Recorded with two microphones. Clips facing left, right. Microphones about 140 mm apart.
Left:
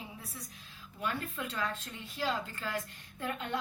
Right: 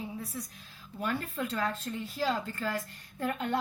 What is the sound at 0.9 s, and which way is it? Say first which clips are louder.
A woman's voice: right 4 dB; 40° right (ahead or behind).